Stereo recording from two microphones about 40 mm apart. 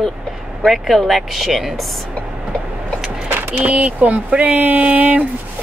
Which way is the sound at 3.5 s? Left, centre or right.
Right.